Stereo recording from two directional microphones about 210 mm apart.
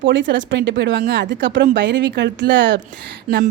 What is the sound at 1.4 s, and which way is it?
Speech, 60° right (ahead or behind).